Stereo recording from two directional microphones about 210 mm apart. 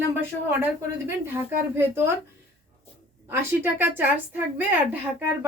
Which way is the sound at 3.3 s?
10° right (ahead or behind).